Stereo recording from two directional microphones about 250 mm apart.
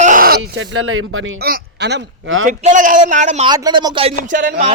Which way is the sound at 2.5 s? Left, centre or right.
Right.